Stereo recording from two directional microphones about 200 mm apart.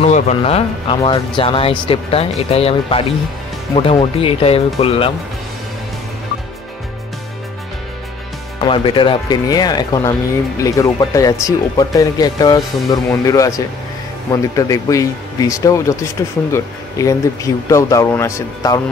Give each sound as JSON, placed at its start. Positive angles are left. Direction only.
{"t": 0.0, "sound": "speech", "side_deg": 35}
{"t": 8.5, "sound": "speech", "side_deg": 25}